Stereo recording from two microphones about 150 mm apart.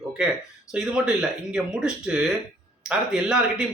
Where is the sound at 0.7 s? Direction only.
5° right (ahead or behind).